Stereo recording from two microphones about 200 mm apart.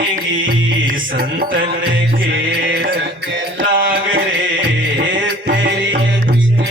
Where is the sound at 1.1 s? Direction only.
45° right (ahead or behind).